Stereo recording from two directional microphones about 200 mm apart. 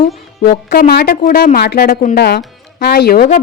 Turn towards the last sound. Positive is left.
turn(degrees=50)  # may be behind; listen again after turning